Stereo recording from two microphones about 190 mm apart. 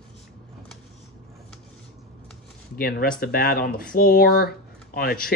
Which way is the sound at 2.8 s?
50° left (ahead or behind).